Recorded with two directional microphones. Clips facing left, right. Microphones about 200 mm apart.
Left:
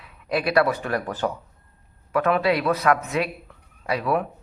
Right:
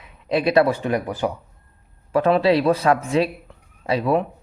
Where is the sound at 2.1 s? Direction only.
30° right (ahead or behind).